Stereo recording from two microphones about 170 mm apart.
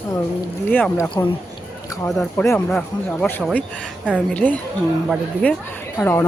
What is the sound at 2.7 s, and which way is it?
Speech, 5° left (ahead or behind).